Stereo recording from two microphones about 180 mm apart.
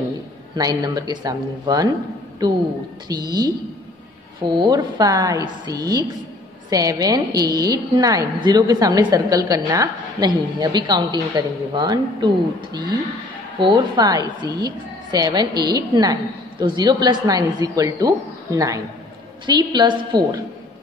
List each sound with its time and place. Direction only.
0.6 s a woman's voice: 20° right (ahead or behind)
4.6 s a woman's voice: 20° right (ahead or behind)
13.6 s a woman's voice: 25° right (ahead or behind)